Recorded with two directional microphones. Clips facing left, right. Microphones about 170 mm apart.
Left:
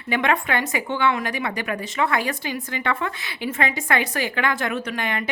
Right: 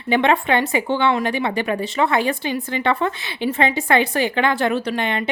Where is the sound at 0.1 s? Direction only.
25° right (ahead or behind).